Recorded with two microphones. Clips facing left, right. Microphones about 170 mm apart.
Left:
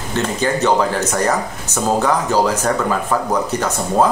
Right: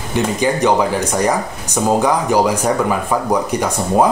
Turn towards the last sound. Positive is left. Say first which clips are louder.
# right 2 dB
turn(degrees=-15)  # may be behind; listen again after turning